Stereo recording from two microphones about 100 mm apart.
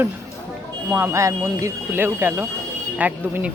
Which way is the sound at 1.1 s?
30° right (ahead or behind).